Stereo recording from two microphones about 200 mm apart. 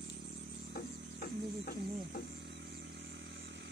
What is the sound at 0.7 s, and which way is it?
Music, 50° left (ahead or behind).